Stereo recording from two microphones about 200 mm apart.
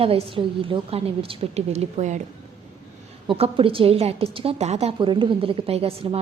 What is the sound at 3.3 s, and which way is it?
A woman's voice, 25° right (ahead or behind).